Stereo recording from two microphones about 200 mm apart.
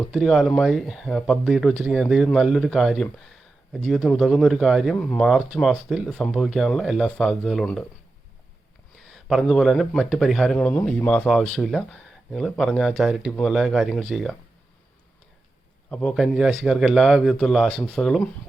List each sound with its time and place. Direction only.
0.1 s speech: centre (ahead or behind)
9.0 s speech: centre (ahead or behind)
15.9 s speech: 5° left (ahead or behind)